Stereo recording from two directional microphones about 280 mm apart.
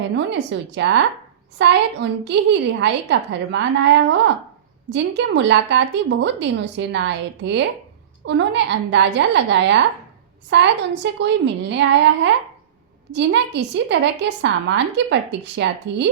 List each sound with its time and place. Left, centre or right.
0.1 s a woman's voice: right
4.9 s a woman's voice: right